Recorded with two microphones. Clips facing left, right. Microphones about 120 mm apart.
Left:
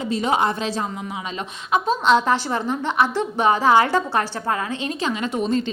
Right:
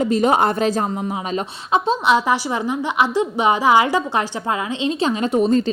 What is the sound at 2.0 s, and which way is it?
A woman's voice, 10° right (ahead or behind).